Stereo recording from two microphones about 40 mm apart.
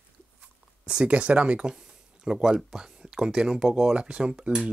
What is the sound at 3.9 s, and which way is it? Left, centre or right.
Speech, right.